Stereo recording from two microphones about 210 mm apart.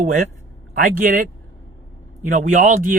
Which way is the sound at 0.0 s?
35° right (ahead or behind).